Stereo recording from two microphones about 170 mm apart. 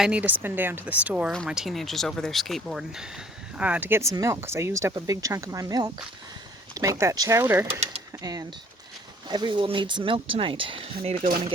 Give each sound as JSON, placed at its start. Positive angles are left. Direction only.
{"t": 0.0, "sound": "speech", "side_deg": -5}